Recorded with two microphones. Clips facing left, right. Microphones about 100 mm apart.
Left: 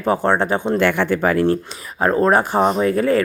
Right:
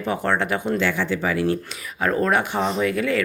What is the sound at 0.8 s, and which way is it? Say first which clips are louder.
Speech: left 6 dB; 60° left (ahead or behind).